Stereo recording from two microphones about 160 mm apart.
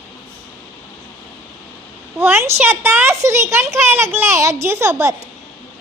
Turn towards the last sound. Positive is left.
turn(degrees=-20)  # may be behind; listen again after turning